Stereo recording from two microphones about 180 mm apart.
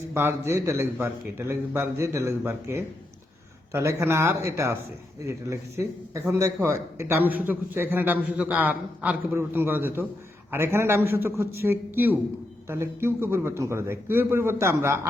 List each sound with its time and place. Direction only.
0.1 s a man's voice: 15° right (ahead or behind)